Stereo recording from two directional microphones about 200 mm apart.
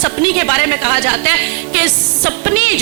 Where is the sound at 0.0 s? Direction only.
10° right (ahead or behind).